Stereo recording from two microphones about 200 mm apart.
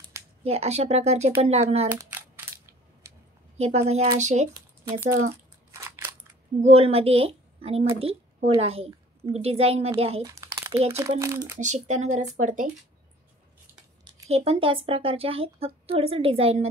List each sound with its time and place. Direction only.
0.4 s a woman's voice: 30° right (ahead or behind)
1.9 s crushing: 10° right (ahead or behind)
3.5 s a woman's voice: 30° right (ahead or behind)
5.7 s scissors: 15° right (ahead or behind)
6.6 s a woman's voice: 30° right (ahead or behind)
10.2 s a sound: 15° right (ahead or behind)
11.0 s speech: 15° right (ahead or behind)
11.6 s a woman's voice: 35° right (ahead or behind)
14.0 s speech: 30° right (ahead or behind)